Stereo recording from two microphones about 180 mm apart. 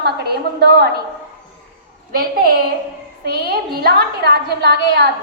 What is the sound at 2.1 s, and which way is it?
A woman's voice, 55° right (ahead or behind).